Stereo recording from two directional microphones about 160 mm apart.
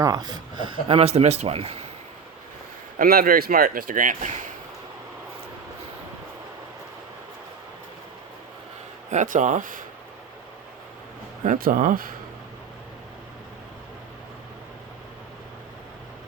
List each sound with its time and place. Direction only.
0.0 s speech: 25° right (ahead or behind)
3.0 s speech: 65° right (ahead or behind)
9.0 s speech: 50° right (ahead or behind)
11.4 s speech: 60° right (ahead or behind)